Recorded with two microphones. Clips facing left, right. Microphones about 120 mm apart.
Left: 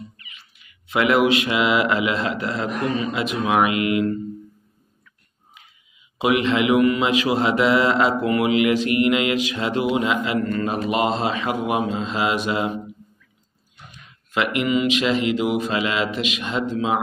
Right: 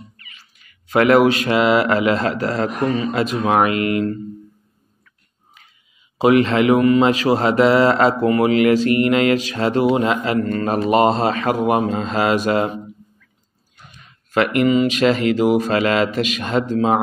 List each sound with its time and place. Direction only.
0.3 s speech: 40° right (ahead or behind)
6.1 s speech: 35° right (ahead or behind)
14.3 s speech: 45° right (ahead or behind)